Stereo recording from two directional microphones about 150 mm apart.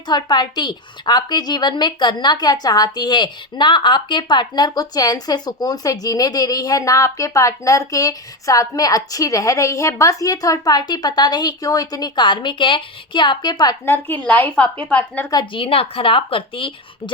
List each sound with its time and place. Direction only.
0.1 s a woman's voice: 30° left (ahead or behind)
13.8 s speech: 15° left (ahead or behind)
15.3 s speech: 30° left (ahead or behind)